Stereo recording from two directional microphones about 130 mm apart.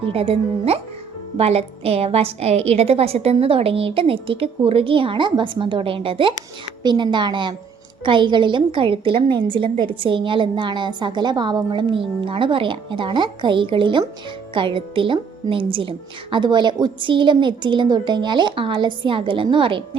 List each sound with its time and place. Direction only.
0.0 s a woman's voice: 45° right (ahead or behind)